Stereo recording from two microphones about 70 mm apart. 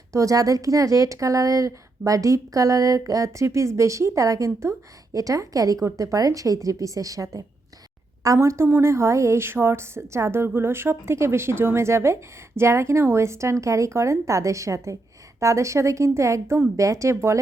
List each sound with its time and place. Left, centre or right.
0.1 s a woman's voice: right